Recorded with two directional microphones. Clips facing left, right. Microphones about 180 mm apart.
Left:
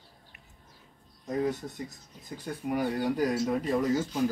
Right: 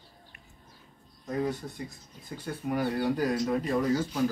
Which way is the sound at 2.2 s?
15° left (ahead or behind).